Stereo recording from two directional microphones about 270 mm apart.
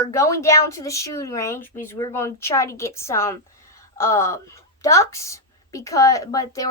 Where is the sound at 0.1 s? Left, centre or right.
Centre.